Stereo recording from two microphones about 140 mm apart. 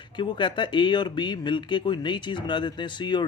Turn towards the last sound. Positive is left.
turn(degrees=35)  # may be behind; listen again after turning